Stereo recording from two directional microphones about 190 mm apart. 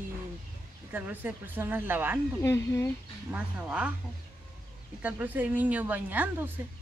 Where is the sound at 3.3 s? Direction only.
5° right (ahead or behind).